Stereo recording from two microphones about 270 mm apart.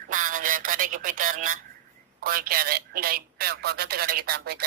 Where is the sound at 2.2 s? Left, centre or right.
Right.